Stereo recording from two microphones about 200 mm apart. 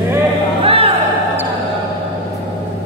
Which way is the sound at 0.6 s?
30° right (ahead or behind).